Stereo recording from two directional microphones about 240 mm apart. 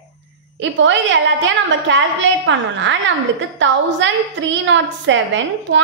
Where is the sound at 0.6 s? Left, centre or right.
Right.